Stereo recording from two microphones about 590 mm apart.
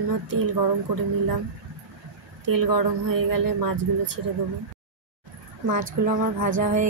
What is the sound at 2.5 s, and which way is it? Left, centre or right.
Speech, right.